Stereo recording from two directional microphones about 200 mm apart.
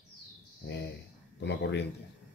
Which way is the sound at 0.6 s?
60° left (ahead or behind).